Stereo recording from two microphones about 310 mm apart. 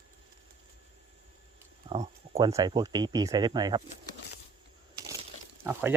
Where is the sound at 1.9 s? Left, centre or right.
Centre.